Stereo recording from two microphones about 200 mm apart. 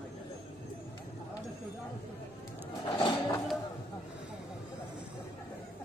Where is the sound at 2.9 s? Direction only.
15° left (ahead or behind).